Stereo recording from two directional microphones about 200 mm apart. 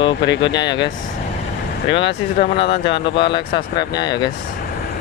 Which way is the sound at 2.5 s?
25° left (ahead or behind).